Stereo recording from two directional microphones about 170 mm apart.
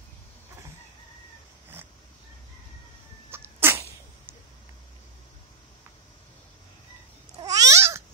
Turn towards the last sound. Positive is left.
turn(degrees=-15)  # may be behind; listen again after turning